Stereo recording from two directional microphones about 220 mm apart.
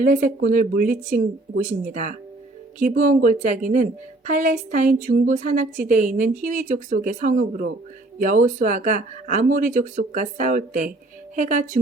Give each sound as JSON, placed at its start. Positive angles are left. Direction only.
{"t": 0.0, "sound": "speech", "side_deg": -35}